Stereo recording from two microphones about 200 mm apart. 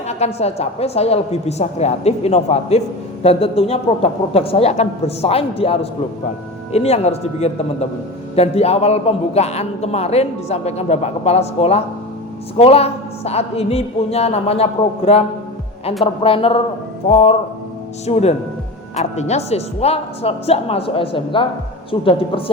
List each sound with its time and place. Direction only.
0.1 s a man's voice: 30° left (ahead or behind)